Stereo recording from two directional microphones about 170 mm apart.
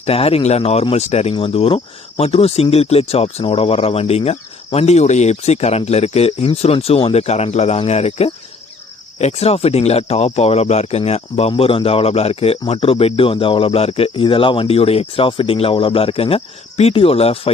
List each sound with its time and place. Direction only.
0.0 s speech: 35° left (ahead or behind)